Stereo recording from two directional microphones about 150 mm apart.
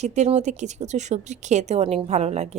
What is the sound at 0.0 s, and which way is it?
Speech, 50° right (ahead or behind).